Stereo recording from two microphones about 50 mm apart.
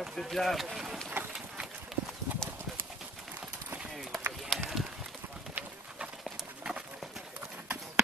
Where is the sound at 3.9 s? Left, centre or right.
Centre.